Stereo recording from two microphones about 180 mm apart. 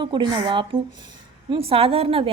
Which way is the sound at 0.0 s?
25° right (ahead or behind).